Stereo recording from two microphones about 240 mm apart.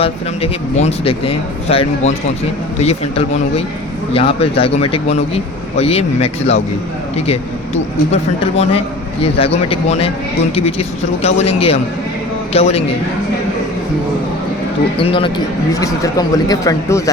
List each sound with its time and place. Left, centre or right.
0.0 s a man's voice: left
14.9 s a man's voice: left